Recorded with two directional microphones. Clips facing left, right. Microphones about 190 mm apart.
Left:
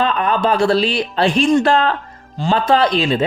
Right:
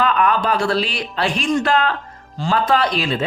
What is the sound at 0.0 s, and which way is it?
Speech, 25° left (ahead or behind).